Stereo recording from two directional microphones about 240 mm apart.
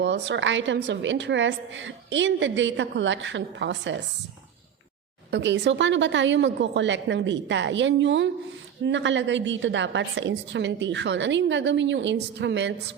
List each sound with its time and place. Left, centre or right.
0.0 s a woman's voice: right
5.3 s a woman's voice: right